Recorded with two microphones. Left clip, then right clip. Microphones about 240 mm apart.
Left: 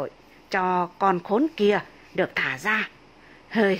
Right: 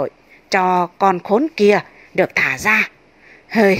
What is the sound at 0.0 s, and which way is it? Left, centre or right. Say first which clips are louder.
A woman's voice: right 9 dB; centre.